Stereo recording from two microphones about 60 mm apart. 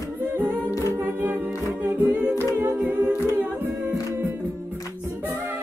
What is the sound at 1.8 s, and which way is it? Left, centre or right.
Humming, right.